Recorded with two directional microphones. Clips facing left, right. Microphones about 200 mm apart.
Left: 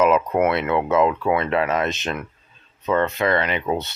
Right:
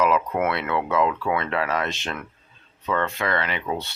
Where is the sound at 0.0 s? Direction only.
20° left (ahead or behind).